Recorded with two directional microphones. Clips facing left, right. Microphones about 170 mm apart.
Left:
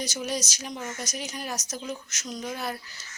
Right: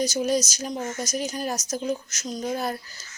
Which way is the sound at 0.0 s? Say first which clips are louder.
Right 8 dB; 40° right (ahead or behind).